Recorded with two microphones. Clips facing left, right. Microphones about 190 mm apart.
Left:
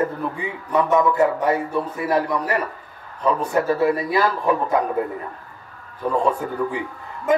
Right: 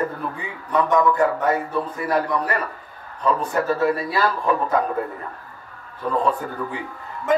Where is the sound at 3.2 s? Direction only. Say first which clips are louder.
Left 1 dB; 10° left (ahead or behind).